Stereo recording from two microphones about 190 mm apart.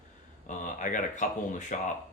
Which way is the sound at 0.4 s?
40° left (ahead or behind).